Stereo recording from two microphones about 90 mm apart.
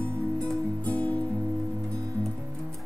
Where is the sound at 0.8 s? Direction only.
15° left (ahead or behind).